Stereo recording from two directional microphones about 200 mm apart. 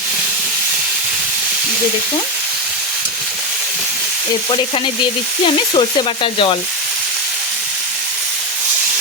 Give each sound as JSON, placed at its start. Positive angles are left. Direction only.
{"t": 4.4, "sound": "frying", "side_deg": 25}